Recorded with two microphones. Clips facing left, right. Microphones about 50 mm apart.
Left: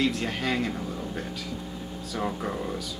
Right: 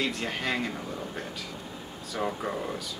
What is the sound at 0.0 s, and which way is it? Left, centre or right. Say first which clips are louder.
Speech: left 3 dB; centre.